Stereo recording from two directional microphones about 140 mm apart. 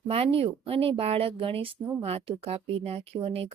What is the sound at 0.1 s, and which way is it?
Speech, 45° right (ahead or behind).